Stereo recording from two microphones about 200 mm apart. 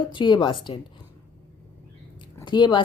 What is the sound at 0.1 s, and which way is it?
Speech, 25° left (ahead or behind).